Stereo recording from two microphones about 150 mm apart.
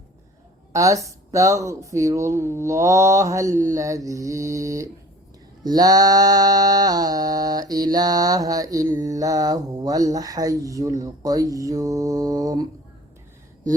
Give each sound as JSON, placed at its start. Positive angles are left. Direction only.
{"t": 0.7, "sound": "mantra", "side_deg": -20}